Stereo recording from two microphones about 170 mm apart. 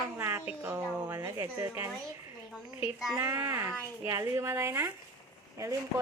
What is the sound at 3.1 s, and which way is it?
A woman's voice, 15° right (ahead or behind).